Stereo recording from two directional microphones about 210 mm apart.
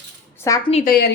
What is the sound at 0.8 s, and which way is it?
Speech, 45° left (ahead or behind).